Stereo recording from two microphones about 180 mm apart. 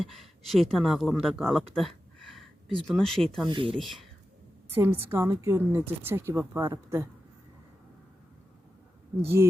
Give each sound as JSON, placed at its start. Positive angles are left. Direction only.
{"t": 0.0, "sound": "speech", "side_deg": 0}
{"t": 3.4, "sound": "speech", "side_deg": -30}
{"t": 3.8, "sound": "speech", "side_deg": 0}
{"t": 4.7, "sound": "a woman's voice", "side_deg": -15}